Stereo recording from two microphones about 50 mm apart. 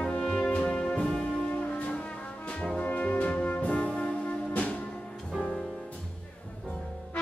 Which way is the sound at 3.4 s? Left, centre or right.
Left.